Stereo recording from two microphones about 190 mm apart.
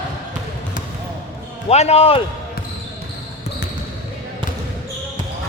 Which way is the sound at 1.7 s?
35° left (ahead or behind).